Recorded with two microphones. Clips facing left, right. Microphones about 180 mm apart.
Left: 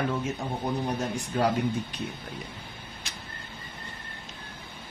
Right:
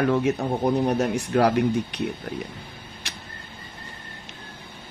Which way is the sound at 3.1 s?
70° right (ahead or behind).